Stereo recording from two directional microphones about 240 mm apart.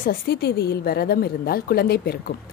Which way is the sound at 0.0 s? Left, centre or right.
Left.